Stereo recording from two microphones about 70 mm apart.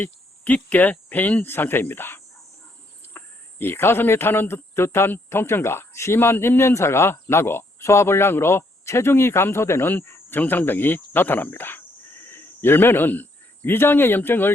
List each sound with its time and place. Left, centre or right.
0.0 s a man's voice: left